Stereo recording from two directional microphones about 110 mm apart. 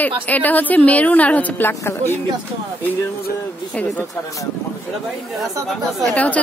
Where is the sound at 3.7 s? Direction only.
15° left (ahead or behind).